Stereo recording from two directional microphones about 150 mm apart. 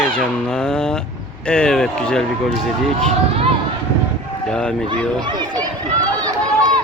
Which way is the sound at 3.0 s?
45° right (ahead or behind).